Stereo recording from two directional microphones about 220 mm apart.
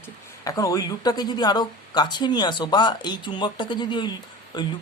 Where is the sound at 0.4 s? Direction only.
15° left (ahead or behind).